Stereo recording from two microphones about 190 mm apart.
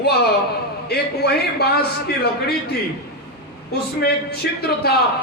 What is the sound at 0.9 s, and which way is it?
Speech, 55° left (ahead or behind).